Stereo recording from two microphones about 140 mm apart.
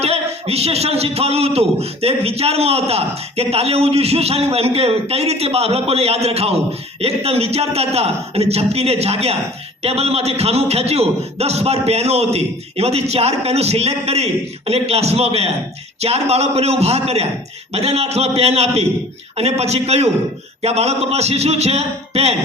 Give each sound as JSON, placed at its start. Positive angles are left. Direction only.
{"t": 0.0, "sound": "a man's voice", "side_deg": -45}